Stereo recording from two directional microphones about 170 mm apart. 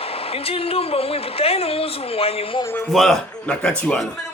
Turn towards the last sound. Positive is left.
turn(degrees=5)  # may be behind; listen again after turning